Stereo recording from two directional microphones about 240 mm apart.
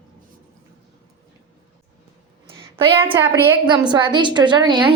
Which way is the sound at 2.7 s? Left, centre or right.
Right.